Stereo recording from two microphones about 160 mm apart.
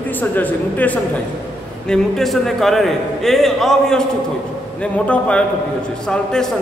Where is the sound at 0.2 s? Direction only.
10° left (ahead or behind).